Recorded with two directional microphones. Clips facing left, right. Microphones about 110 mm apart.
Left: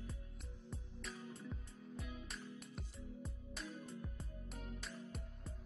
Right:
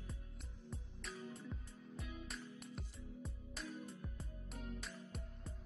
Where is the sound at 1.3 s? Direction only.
Centre (ahead or behind).